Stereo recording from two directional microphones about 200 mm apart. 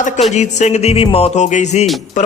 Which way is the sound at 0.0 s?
35° left (ahead or behind).